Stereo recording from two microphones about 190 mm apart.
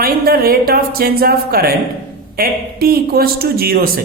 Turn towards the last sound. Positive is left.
turn(degrees=-50)  # may be behind; listen again after turning